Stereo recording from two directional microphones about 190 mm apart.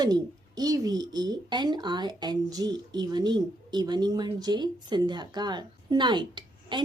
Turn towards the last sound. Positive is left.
turn(degrees=-25)  # may be behind; listen again after turning